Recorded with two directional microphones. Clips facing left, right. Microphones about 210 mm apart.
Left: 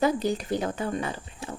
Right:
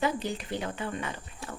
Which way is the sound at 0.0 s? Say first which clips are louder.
Left 6 dB; 40° left (ahead or behind).